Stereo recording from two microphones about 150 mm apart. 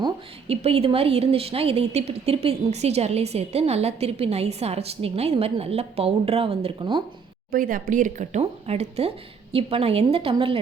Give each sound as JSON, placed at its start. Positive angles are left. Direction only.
{"t": 0.4, "sound": "a woman's voice", "side_deg": -40}
{"t": 7.5, "sound": "a woman's voice", "side_deg": -70}